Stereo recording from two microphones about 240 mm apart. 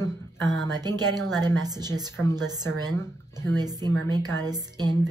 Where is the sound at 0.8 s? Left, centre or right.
Centre.